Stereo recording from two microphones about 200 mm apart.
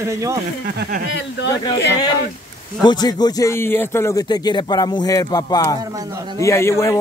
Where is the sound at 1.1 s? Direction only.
60° left (ahead or behind).